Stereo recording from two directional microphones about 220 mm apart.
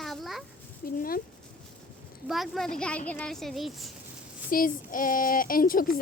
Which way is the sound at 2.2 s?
Centre (ahead or behind).